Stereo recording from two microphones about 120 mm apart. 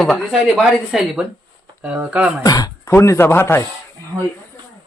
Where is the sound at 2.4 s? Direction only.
30° left (ahead or behind).